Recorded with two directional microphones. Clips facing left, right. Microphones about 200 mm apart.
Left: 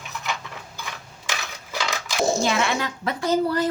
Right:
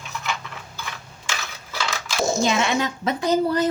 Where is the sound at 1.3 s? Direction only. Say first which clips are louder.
Left 1 dB; 15° left (ahead or behind).